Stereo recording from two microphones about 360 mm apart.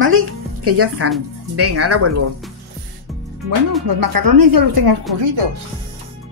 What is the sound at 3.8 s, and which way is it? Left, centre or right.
Speech, right.